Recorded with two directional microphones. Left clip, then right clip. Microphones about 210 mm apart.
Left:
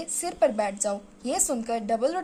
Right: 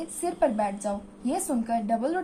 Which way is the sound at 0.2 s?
50° left (ahead or behind).